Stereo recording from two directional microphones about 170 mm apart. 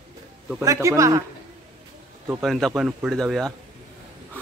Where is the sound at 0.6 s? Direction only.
20° right (ahead or behind).